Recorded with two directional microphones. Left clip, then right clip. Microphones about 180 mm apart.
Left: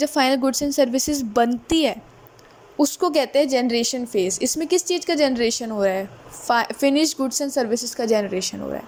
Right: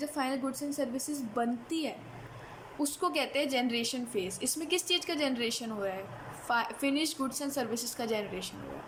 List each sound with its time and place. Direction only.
0.0 s a woman's voice: 45° left (ahead or behind)